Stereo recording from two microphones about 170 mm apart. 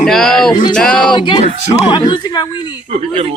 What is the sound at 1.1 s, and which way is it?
Speech, 25° left (ahead or behind).